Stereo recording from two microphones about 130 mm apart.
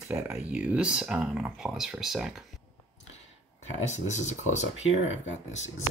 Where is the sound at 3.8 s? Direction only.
65° left (ahead or behind).